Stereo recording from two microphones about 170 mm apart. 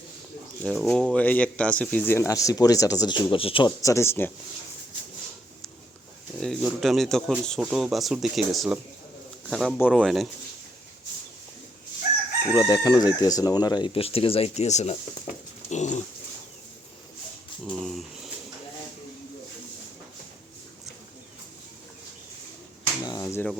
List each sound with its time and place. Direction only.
0.6 s speech: centre (ahead or behind); by 3.7 s 30° left (ahead or behind)
3.8 s speech: 20° left (ahead or behind)
6.6 s speech: 5° right (ahead or behind)
12.5 s speech: 20° left (ahead or behind); by 16.0 s 45° left (ahead or behind)
17.7 s a sound: centre (ahead or behind)
23.0 s a sound: 15° left (ahead or behind)